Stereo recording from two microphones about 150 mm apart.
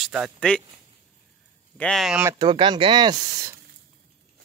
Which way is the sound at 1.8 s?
5° left (ahead or behind).